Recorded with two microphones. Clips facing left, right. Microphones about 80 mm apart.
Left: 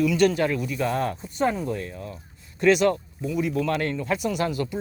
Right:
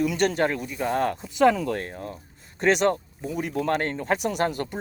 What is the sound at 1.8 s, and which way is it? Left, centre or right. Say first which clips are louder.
Speech: right 1 dB; right.